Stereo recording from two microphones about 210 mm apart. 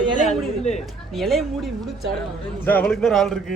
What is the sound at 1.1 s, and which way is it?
Speech, centre (ahead or behind).